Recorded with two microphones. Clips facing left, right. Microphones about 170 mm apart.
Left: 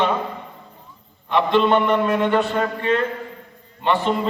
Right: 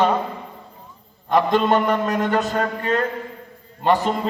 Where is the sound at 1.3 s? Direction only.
40° right (ahead or behind).